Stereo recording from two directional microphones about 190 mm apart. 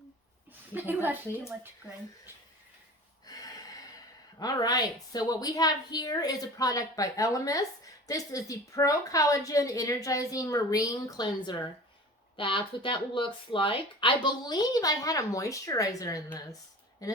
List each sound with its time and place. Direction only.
0.7 s a woman's voice: 10° right (ahead or behind)
3.2 s a sound: 20° left (ahead or behind)
4.4 s a woman's voice: 20° left (ahead or behind)